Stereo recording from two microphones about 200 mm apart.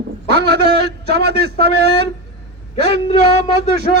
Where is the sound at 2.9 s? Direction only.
30° left (ahead or behind).